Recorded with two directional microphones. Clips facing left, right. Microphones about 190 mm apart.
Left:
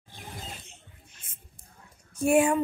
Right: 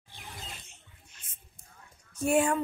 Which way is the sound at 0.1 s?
50° left (ahead or behind).